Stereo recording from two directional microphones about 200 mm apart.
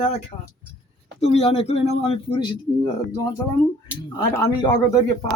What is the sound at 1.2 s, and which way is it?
Speech, 30° left (ahead or behind).